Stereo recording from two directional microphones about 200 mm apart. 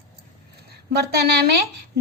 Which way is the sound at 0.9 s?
55° right (ahead or behind).